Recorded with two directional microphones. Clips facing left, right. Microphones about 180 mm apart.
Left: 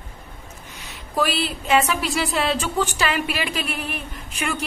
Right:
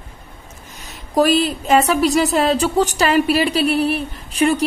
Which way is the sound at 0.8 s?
40° right (ahead or behind).